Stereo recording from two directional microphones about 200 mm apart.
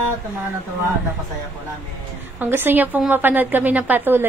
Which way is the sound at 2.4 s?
10° right (ahead or behind).